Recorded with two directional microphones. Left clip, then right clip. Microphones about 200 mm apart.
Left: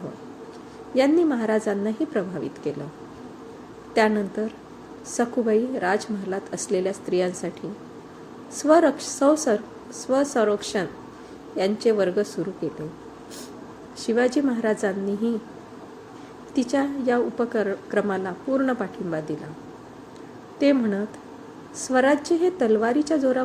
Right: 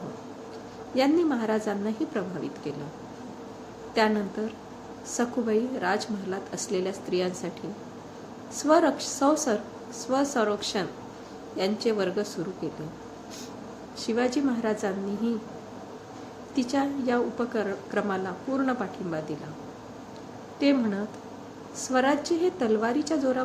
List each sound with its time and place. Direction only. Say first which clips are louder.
0.9 s a woman's voice: left 4 dB; 15° left (ahead or behind)
3.9 s a woman's voice: left 4 dB; 15° left (ahead or behind)
8.5 s a woman's voice: left 4 dB; 15° left (ahead or behind)
14.0 s a woman's voice: left 5 dB; 15° left (ahead or behind)
16.6 s a woman's voice: left 3 dB; 15° left (ahead or behind)
20.6 s a woman's voice: left 4 dB; 15° left (ahead or behind)